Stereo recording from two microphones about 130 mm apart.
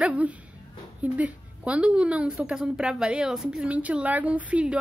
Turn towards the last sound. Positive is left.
turn(degrees=-10)  # may be behind; listen again after turning